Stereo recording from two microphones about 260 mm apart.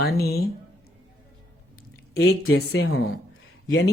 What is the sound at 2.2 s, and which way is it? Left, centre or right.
Speech, left.